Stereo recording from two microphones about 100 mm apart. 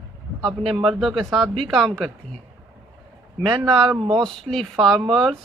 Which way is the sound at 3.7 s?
5° left (ahead or behind).